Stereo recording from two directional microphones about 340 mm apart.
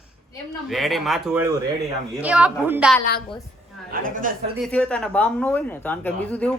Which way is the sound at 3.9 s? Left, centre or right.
Right.